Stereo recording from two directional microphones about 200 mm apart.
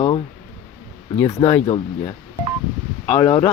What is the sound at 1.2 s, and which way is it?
Speech, 15° left (ahead or behind).